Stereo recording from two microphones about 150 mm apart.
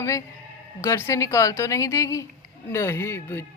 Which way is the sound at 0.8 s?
20° left (ahead or behind).